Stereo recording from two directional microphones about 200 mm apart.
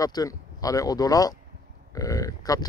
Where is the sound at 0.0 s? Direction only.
20° left (ahead or behind).